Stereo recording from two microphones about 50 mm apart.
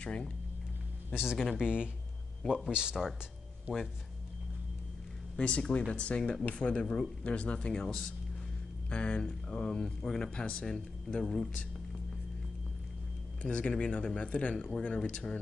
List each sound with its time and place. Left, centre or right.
0.0 s speech: left
1.1 s speech: centre
5.4 s speech: left
13.4 s speech: left